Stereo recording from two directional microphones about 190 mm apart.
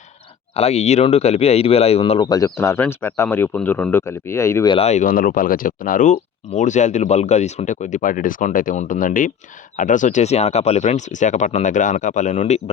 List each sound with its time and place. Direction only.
0.5 s speech: 35° left (ahead or behind)
2.2 s speech: 20° left (ahead or behind)
4.7 s speech: 35° left (ahead or behind)